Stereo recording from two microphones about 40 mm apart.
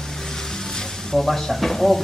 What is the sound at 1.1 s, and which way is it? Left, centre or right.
Speech, centre.